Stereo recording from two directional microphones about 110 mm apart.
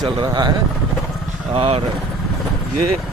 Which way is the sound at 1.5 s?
60° right (ahead or behind).